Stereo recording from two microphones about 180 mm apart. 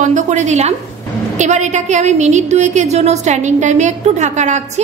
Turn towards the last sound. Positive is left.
turn(degrees=-40)  # may be behind; listen again after turning